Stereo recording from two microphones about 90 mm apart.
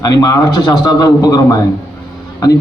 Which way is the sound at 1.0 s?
40° left (ahead or behind).